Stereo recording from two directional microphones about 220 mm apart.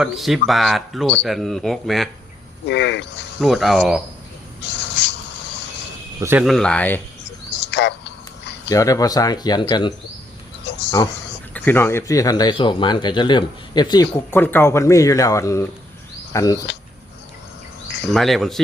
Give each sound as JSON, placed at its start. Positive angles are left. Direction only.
{"t": 0.0, "sound": "speech", "side_deg": 0}
{"t": 2.6, "sound": "speech", "side_deg": 50}
{"t": 3.4, "sound": "speech", "side_deg": 0}
{"t": 4.6, "sound": "a sound", "side_deg": 50}
{"t": 6.1, "sound": "speech", "side_deg": -10}
{"t": 6.4, "sound": "speech", "side_deg": 0}
{"t": 7.6, "sound": "bird", "side_deg": 50}
{"t": 8.7, "sound": "speech", "side_deg": 15}
{"t": 10.7, "sound": "a sound", "side_deg": 50}
{"t": 11.5, "sound": "speech", "side_deg": 10}
{"t": 14.1, "sound": "speech", "side_deg": 10}
{"t": 18.1, "sound": "speech", "side_deg": 0}